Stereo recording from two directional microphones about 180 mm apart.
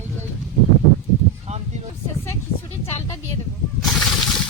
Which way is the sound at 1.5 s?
35° right (ahead or behind).